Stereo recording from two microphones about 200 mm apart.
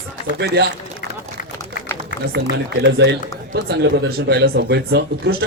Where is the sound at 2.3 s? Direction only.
60° right (ahead or behind).